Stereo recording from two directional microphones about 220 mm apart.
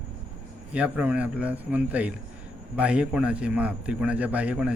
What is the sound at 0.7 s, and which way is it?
A man's voice, 5° right (ahead or behind).